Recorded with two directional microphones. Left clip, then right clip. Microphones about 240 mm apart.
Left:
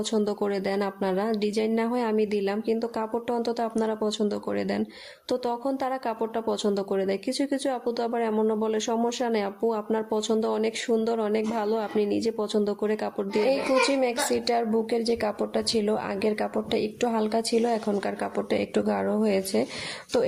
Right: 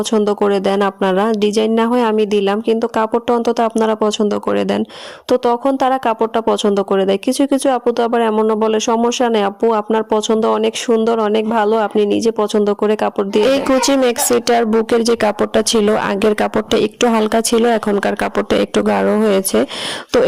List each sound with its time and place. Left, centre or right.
0.1 s speech: right